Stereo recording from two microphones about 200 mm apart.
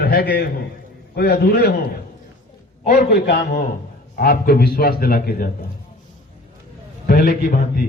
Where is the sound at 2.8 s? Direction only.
45° left (ahead or behind).